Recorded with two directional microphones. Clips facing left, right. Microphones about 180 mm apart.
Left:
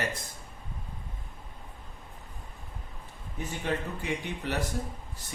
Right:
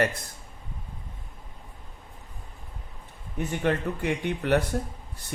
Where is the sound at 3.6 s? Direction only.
60° right (ahead or behind).